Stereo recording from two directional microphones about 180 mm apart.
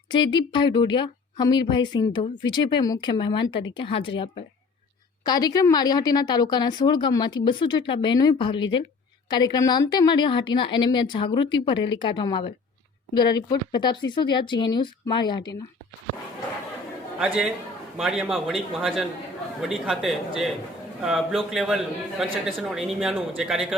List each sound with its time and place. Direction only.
0.1 s speech: 25° left (ahead or behind)
17.2 s speech: 5° right (ahead or behind)